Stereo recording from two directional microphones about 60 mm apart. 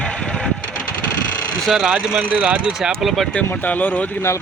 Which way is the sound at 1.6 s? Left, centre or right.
Centre.